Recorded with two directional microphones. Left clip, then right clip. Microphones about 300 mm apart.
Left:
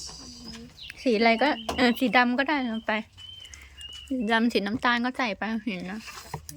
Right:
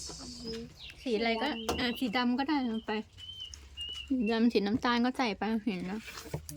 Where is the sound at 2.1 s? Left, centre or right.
Centre.